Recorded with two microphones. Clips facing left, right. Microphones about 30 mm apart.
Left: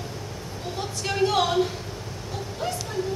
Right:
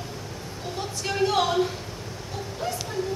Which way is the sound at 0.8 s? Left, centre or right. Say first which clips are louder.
Left 1 dB; centre.